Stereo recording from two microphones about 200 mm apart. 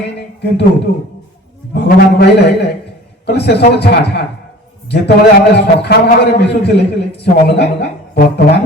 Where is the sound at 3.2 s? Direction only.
55° left (ahead or behind).